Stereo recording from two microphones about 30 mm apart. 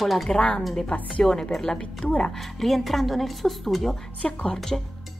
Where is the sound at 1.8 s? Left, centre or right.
Left.